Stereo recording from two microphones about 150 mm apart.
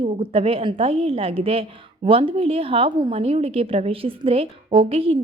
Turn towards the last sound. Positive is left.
turn(degrees=-40)  # may be behind; listen again after turning